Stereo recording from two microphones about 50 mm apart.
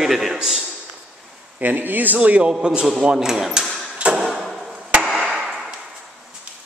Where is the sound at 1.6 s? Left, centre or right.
Right.